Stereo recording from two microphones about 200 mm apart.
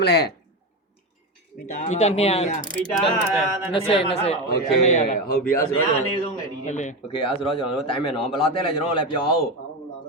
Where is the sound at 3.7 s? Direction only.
30° left (ahead or behind).